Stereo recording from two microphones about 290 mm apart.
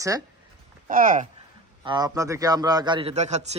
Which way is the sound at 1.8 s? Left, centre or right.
Centre.